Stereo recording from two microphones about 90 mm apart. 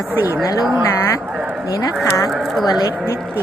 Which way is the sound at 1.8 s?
40° left (ahead or behind).